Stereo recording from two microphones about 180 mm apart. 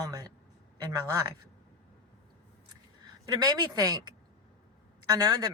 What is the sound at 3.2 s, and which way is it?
A woman's voice, 20° right (ahead or behind).